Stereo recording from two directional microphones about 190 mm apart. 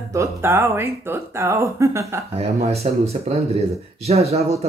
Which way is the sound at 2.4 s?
35° right (ahead or behind).